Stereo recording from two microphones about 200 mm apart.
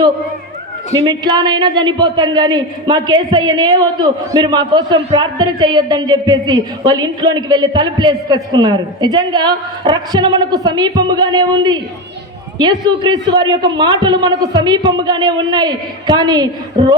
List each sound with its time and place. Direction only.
0.9 s a man's voice: 20° right (ahead or behind)